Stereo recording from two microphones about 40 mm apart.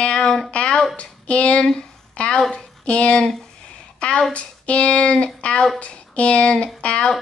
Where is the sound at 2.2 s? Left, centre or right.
Left.